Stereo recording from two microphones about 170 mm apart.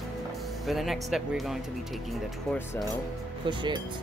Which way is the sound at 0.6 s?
Centre (ahead or behind).